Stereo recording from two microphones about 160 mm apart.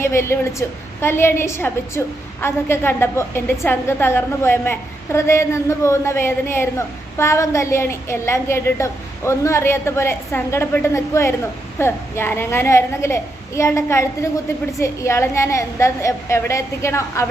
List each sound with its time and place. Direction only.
0.0 s a woman's voice: 15° left (ahead or behind)